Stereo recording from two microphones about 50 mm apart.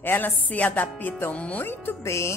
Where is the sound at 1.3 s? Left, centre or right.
Left.